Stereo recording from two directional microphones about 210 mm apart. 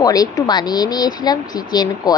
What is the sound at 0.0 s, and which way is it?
Speech, 15° left (ahead or behind).